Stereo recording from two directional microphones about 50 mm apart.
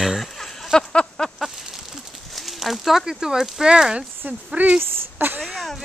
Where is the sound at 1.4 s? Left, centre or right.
Centre.